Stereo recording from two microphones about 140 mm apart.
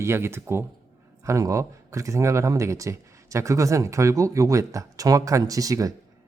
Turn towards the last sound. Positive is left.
turn(degrees=-25)  # may be behind; listen again after turning